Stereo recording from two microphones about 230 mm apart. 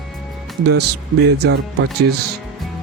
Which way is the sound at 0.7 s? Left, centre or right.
Right.